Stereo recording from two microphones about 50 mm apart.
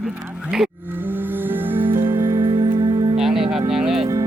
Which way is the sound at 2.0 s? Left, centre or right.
Right.